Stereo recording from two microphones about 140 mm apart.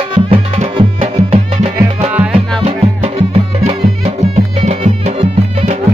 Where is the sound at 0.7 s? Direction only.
45° right (ahead or behind).